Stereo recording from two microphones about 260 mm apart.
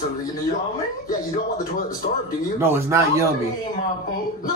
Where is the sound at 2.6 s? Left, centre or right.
Centre.